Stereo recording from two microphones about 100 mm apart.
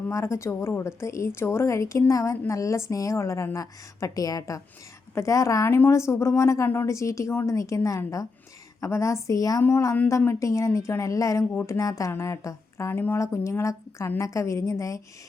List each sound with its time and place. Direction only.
0.1 s a woman's voice: 30° left (ahead or behind)